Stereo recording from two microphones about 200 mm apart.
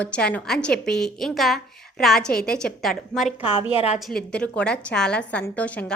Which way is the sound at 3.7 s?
30° left (ahead or behind).